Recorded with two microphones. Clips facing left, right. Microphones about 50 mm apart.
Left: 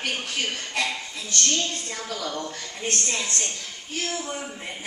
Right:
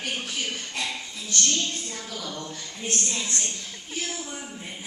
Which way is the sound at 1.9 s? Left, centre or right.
Left.